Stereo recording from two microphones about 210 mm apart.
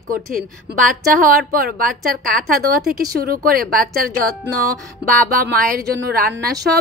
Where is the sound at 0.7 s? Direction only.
40° right (ahead or behind).